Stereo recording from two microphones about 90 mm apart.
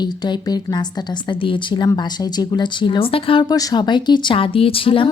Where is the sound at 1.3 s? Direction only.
65° left (ahead or behind).